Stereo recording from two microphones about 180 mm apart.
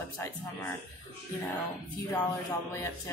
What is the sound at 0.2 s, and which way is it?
Speech, 15° left (ahead or behind).